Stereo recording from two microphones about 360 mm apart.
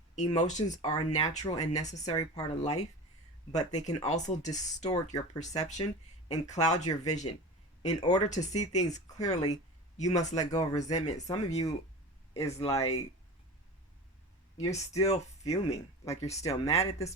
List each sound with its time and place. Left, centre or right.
0.2 s speech: centre
14.6 s speech: centre